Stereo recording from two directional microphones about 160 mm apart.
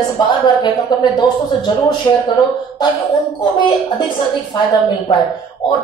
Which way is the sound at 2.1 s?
30° left (ahead or behind).